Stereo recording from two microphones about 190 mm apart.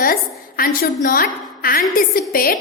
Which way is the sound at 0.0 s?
50° left (ahead or behind).